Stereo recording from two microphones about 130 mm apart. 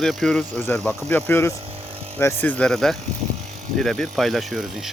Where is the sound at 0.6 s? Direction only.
20° left (ahead or behind).